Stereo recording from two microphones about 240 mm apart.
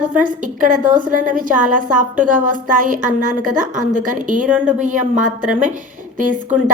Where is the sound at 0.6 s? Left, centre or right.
Right.